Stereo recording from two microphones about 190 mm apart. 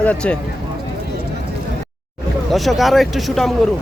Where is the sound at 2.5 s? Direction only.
Centre (ahead or behind).